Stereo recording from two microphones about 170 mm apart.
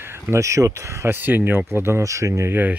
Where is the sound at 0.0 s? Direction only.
15° right (ahead or behind).